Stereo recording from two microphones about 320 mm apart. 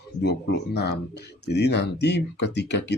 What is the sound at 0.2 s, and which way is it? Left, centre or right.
Speech, left.